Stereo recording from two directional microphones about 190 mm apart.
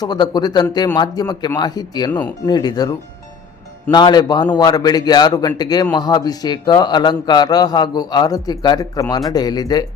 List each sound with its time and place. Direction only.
0.0 s a man's voice: 20° left (ahead or behind)
3.9 s a man's voice: 20° left (ahead or behind)